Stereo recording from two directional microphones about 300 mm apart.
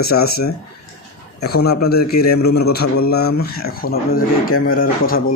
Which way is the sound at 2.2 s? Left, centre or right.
Left.